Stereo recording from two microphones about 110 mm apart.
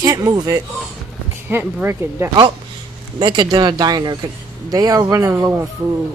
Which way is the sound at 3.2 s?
45° right (ahead or behind).